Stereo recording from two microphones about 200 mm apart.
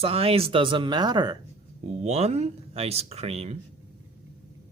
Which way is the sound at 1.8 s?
30° right (ahead or behind).